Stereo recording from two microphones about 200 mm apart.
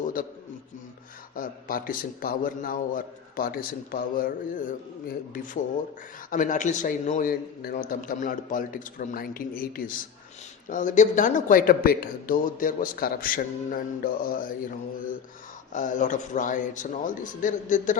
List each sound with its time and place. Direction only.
0.2 s a man's voice: 45° left (ahead or behind)
1.4 s a man's voice: 45° left (ahead or behind)
15.7 s a man's voice: 40° left (ahead or behind)